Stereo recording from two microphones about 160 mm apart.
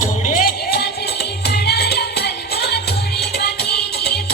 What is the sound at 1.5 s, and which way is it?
Music, 90° left.